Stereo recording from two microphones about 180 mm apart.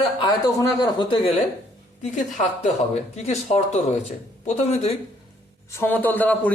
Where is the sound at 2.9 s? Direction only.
40° left (ahead or behind).